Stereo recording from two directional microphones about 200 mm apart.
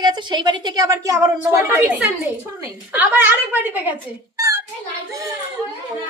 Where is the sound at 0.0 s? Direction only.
20° right (ahead or behind).